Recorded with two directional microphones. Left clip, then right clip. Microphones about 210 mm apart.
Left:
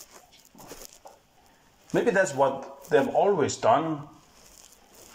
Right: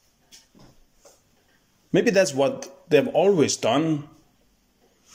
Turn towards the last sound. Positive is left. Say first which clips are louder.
# even
turn(degrees=-55)  # may be behind; listen again after turning